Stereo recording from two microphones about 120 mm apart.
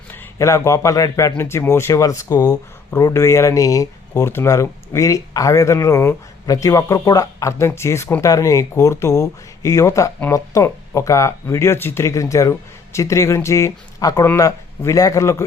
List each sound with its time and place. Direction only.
0.1 s a man's voice: 25° left (ahead or behind)